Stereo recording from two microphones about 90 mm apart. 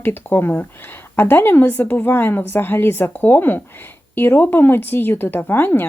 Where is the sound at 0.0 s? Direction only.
25° left (ahead or behind).